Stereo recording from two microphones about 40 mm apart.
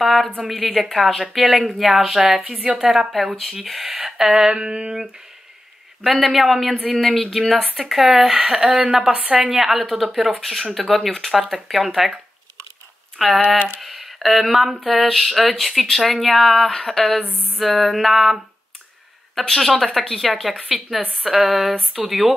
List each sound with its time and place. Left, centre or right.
0.0 s speech: centre
2.4 s a sound: right
2.8 s speech: centre
4.5 s a sound: right
6.2 s speech: centre
9.1 s a woman's voice: right
9.5 s speech: centre
13.2 s speech: centre
17.3 s a sound: right
17.6 s speech: centre
19.4 s speech: centre
20.6 s speech: centre